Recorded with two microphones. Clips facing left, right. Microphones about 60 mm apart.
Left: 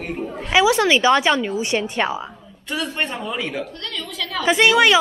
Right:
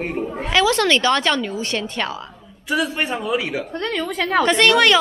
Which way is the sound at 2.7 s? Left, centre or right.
Centre.